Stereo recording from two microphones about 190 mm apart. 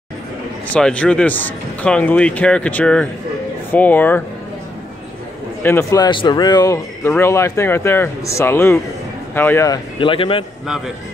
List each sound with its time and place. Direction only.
0.7 s a man's voice: 5° left (ahead or behind)
5.6 s speech: 15° left (ahead or behind)
9.9 s speech: 25° left (ahead or behind)